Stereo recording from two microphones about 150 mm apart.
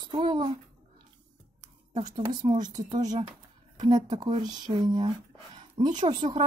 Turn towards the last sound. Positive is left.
turn(degrees=-30)  # may be behind; listen again after turning